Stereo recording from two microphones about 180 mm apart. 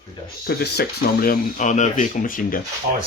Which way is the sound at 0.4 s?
65° left (ahead or behind).